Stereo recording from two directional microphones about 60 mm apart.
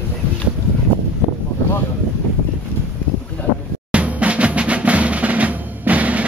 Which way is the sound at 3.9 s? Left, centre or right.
Right.